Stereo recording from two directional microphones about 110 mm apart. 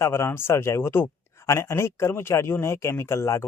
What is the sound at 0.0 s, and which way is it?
Speech, 25° left (ahead or behind).